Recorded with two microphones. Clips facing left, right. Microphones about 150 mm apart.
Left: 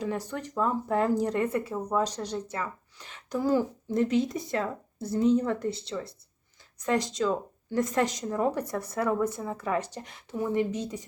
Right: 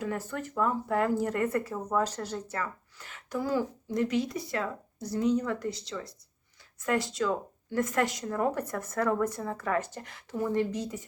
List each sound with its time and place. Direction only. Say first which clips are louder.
0.3 s speech: left 1 dB; 20° left (ahead or behind)